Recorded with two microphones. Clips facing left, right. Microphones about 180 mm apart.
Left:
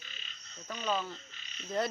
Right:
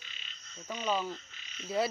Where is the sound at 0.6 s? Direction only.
10° right (ahead or behind).